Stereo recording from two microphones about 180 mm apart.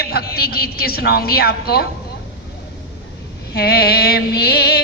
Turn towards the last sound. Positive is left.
turn(degrees=60)  # may be behind; listen again after turning